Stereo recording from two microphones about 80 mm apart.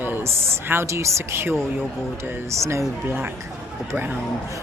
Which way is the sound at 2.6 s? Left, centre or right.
Right.